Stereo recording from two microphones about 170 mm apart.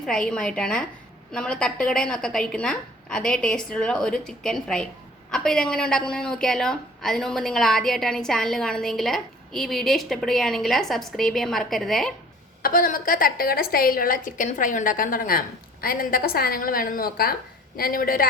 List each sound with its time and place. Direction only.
0.0 s a woman's voice: 5° left (ahead or behind)
12.6 s a woman's voice: 55° left (ahead or behind)